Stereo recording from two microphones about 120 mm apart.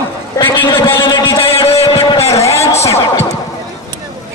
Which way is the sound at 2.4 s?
25° left (ahead or behind).